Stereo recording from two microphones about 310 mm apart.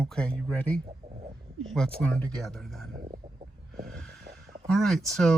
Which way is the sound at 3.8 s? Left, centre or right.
Centre.